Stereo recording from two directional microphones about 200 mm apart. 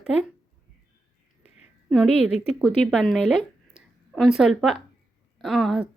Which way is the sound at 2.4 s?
5° right (ahead or behind).